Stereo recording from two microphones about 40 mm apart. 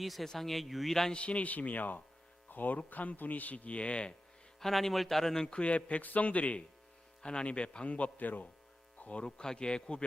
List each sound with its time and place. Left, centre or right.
0.0 s speech: centre
1.1 s a man's voice: left
4.6 s speech: centre
5.5 s a man's voice: left
7.2 s a man's voice: left
9.0 s a sound: left
9.2 s a man's voice: left